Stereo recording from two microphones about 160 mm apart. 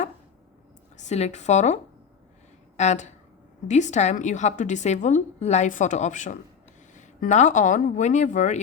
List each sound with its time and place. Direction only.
0.9 s a woman's voice: 45° left (ahead or behind)